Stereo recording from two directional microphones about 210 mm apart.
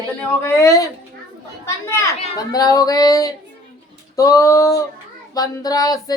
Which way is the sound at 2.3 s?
20° left (ahead or behind).